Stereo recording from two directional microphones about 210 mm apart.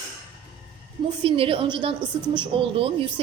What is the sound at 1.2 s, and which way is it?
A woman's voice, 25° right (ahead or behind).